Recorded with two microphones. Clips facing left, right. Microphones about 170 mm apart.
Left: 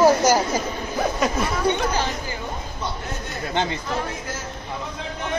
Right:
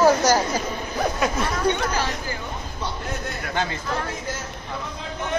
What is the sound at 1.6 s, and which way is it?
Speech, 10° left (ahead or behind).